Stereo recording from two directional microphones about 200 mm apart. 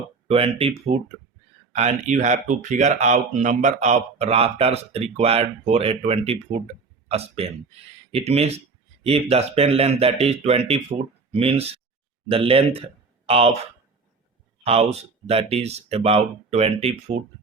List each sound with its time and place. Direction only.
0.3 s speech: 30° right (ahead or behind)
14.6 s speech: 30° right (ahead or behind)